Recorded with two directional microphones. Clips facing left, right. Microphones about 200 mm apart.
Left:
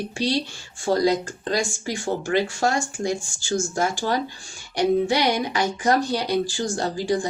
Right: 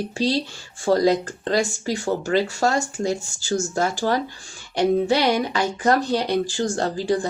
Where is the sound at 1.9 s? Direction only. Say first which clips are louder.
Even; 40° right (ahead or behind).